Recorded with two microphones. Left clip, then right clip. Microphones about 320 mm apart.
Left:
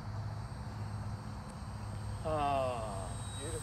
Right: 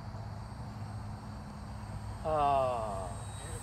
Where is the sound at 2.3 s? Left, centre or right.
Centre.